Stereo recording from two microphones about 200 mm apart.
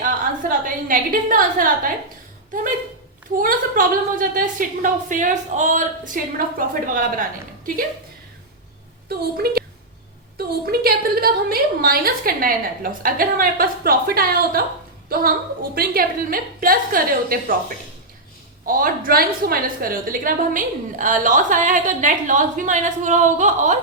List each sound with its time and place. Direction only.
0.0 s a sound: 40° right (ahead or behind)
3.4 s a woman's voice: 40° right (ahead or behind)
9.0 s a woman's voice: 50° right (ahead or behind)
15.7 s a woman's voice: 50° right (ahead or behind)
18.6 s a woman's voice: 45° right (ahead or behind)